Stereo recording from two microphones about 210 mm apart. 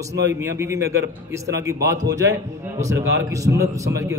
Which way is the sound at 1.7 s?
15° right (ahead or behind).